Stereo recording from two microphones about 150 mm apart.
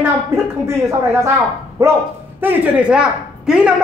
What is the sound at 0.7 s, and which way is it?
A woman's voice, 15° right (ahead or behind).